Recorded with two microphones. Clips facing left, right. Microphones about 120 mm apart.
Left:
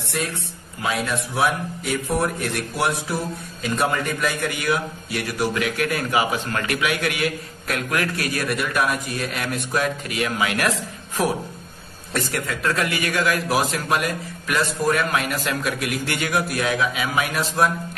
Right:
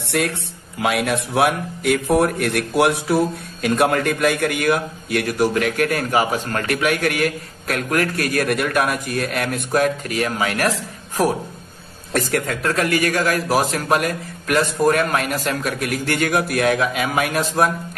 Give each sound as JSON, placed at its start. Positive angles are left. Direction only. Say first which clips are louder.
{"t": 0.1, "sound": "a man's voice", "louder": "right 6 dB", "side_deg": -65}
{"t": 12.1, "sound": "a man's voice", "louder": "right 5 dB", "side_deg": -55}